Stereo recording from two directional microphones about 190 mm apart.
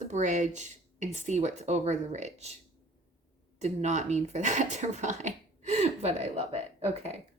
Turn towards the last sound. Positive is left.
turn(degrees=-35)  # may be behind; listen again after turning